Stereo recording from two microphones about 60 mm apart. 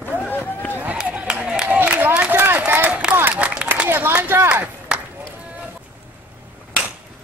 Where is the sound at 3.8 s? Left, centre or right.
Right.